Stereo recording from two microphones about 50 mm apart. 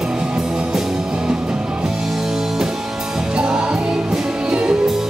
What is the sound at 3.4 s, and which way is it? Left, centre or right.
Music, centre.